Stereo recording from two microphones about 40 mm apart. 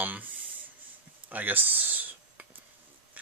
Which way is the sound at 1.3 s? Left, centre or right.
Right.